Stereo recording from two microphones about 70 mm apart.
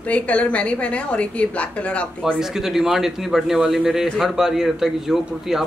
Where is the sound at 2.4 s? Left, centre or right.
Centre.